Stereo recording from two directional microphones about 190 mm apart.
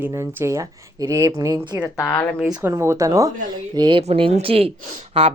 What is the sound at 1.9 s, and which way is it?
Speech, 15° left (ahead or behind).